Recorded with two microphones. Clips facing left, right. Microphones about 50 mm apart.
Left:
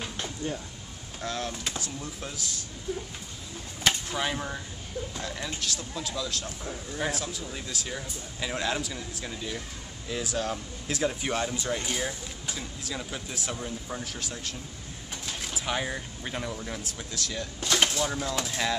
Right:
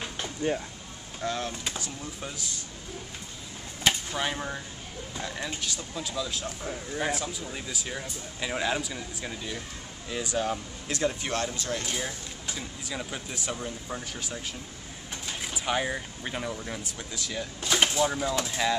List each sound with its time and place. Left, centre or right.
1.2 s speech: centre
3.8 s a sound: centre
5.1 s speech: centre
11.5 s speech: centre
11.9 s speech: centre